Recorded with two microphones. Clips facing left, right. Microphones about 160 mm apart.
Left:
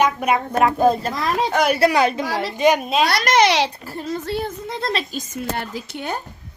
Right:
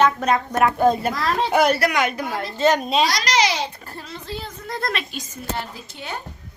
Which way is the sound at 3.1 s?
55° left (ahead or behind).